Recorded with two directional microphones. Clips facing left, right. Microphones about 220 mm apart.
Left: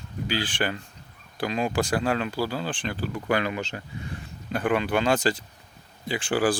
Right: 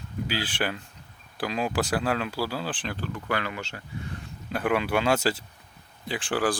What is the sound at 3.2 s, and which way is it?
Speech, 20° left (ahead or behind).